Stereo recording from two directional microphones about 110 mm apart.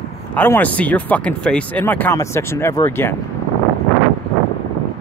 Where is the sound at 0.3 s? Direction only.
15° left (ahead or behind).